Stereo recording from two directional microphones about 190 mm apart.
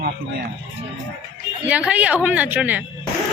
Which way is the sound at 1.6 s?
5° right (ahead or behind).